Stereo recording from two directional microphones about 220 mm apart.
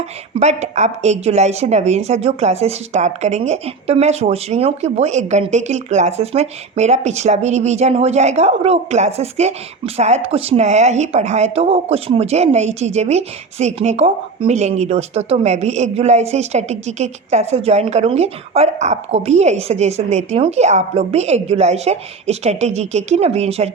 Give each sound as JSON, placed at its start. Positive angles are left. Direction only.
{"t": 0.3, "sound": "speech", "side_deg": -30}